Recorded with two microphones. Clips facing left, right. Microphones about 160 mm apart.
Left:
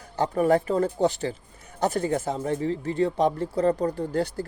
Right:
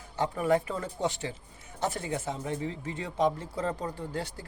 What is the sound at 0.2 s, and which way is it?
Speech, 40° left (ahead or behind).